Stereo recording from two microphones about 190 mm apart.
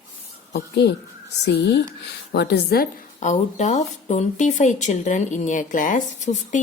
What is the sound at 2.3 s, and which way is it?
Speech, 60° left (ahead or behind).